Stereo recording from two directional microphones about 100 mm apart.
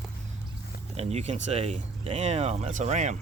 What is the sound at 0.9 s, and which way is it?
Speech, 90° right.